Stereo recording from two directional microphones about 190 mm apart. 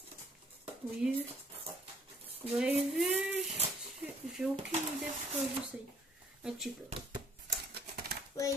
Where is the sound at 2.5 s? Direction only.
10° right (ahead or behind).